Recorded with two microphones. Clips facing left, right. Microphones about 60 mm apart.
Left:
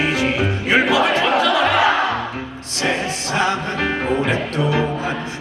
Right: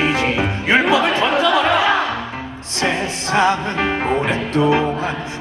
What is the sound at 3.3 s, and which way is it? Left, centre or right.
Music, right.